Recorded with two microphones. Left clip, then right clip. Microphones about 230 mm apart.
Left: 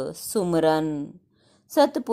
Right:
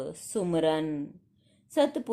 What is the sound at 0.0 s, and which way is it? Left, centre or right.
A woman's voice, left.